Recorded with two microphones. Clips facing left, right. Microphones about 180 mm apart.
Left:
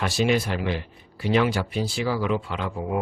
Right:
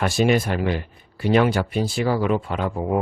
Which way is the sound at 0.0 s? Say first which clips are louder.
Right 3 dB; 50° right (ahead or behind).